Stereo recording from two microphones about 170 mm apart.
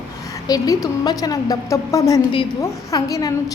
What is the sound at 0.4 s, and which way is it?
A woman's voice, 20° left (ahead or behind).